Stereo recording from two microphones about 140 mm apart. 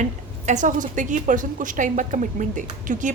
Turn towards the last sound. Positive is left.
turn(degrees=-65)  # may be behind; listen again after turning